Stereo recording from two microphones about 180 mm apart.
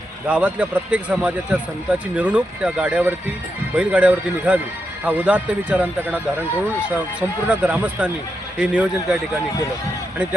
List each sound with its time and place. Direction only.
0.3 s speech: 5° right (ahead or behind)